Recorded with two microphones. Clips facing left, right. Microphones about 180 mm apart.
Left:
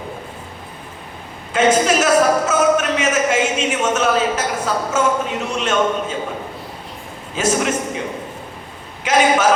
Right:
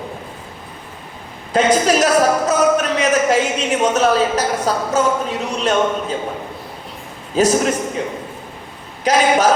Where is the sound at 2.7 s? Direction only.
35° right (ahead or behind).